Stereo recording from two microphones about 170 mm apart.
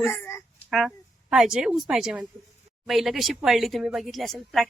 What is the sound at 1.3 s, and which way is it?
A woman's voice, 5° right (ahead or behind).